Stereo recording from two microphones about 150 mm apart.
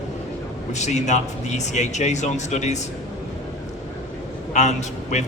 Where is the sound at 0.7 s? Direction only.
50° left (ahead or behind).